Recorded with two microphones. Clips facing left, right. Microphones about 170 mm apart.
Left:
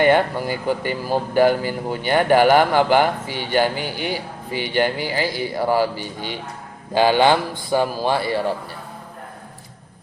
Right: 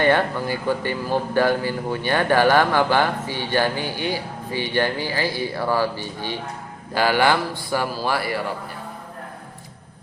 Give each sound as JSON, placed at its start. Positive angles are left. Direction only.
{"t": 0.0, "sound": "speech", "side_deg": 15}